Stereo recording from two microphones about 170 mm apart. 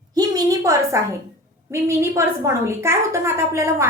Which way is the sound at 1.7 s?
15° right (ahead or behind).